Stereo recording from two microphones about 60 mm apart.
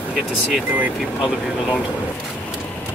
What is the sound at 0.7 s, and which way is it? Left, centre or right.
Speech, right.